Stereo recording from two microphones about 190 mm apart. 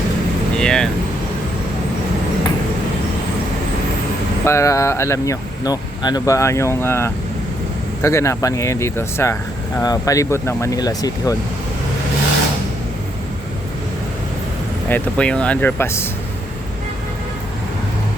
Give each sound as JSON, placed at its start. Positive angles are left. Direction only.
{"t": 0.6, "sound": "vehicle", "side_deg": 5}
{"t": 4.4, "sound": "speech", "side_deg": 15}
{"t": 14.8, "sound": "speech", "side_deg": 10}